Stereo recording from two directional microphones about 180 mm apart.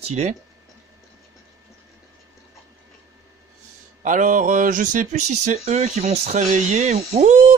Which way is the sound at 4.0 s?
45° right (ahead or behind).